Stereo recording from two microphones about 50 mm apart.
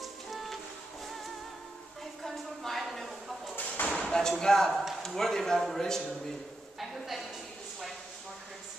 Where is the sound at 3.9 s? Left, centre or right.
Centre.